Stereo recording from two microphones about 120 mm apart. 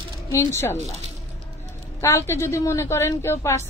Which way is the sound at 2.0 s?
20° left (ahead or behind).